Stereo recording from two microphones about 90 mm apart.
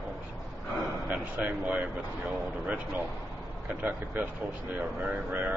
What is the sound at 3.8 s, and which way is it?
Speech, 20° right (ahead or behind).